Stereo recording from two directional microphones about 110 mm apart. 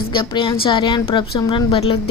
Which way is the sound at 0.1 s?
50° left (ahead or behind).